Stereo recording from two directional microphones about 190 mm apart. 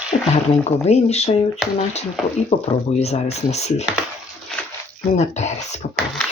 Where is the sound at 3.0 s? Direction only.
35° left (ahead or behind).